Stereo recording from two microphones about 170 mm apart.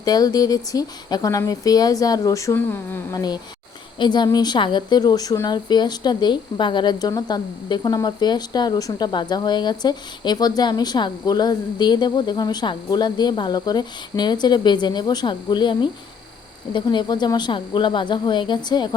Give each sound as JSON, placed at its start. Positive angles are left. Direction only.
{"t": 0.0, "sound": "a woman's voice", "side_deg": 25}